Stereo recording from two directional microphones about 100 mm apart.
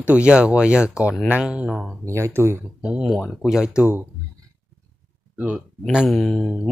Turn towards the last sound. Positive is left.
turn(degrees=5)  # may be behind; listen again after turning